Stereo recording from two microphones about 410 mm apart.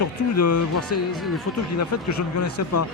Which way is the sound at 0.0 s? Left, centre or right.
Left.